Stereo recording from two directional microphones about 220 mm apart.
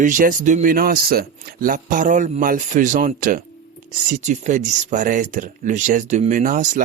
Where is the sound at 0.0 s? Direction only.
35° right (ahead or behind).